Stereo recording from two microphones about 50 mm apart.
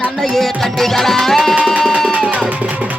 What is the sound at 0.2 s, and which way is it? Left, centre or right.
Music, centre.